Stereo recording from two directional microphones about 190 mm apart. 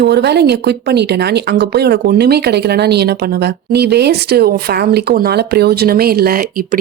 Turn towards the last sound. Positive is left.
turn(degrees=-50)  # may be behind; listen again after turning